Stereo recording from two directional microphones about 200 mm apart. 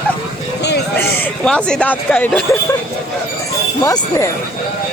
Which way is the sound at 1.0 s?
5° left (ahead or behind).